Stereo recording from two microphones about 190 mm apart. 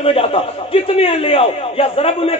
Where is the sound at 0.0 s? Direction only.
30° left (ahead or behind).